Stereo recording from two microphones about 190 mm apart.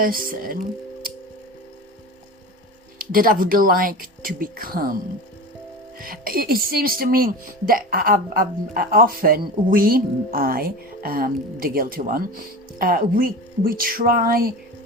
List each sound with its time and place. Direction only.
0.0 s speech: 50° right (ahead or behind)
3.0 s speech: 50° right (ahead or behind)
6.0 s speech: 50° right (ahead or behind)